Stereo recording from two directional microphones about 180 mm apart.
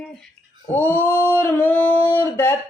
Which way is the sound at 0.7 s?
10° left (ahead or behind).